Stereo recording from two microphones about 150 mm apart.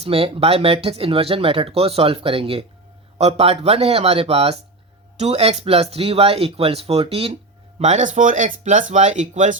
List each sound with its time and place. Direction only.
0.0 s speech: 40° right (ahead or behind)
7.8 s speech: 50° right (ahead or behind)